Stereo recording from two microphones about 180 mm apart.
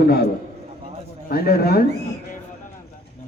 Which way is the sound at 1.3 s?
60° left (ahead or behind).